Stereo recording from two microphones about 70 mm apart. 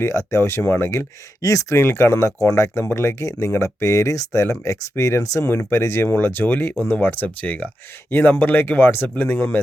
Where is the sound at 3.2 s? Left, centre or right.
Left.